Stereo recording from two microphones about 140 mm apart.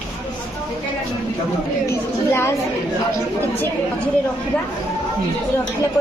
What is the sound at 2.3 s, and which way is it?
Speech, 20° left (ahead or behind).